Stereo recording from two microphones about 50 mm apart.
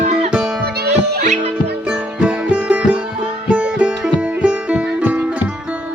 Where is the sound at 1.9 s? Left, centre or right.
Right.